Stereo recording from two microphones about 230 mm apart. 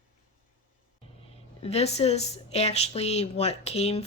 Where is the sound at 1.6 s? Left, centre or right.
Left.